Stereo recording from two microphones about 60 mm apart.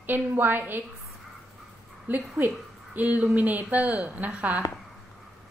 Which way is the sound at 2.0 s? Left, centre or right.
Right.